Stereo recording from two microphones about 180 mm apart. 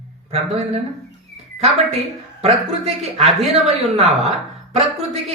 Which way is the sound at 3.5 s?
35° right (ahead or behind).